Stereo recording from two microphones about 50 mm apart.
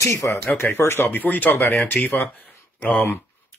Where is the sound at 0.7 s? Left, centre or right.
Left.